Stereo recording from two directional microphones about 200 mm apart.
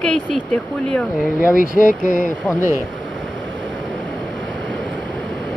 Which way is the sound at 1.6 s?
40° left (ahead or behind).